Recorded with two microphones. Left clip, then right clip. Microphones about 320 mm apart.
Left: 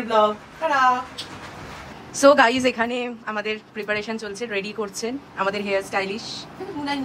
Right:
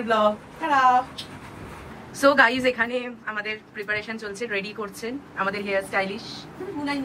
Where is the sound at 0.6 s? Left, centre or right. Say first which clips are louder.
Left 1 dB; centre.